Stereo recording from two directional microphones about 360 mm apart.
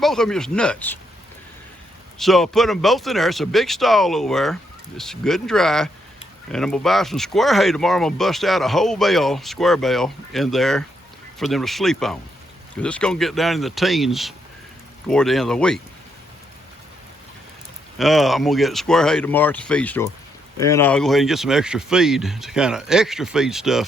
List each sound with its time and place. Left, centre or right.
0.0 s speech: centre
2.1 s speech: centre
17.9 s speech: centre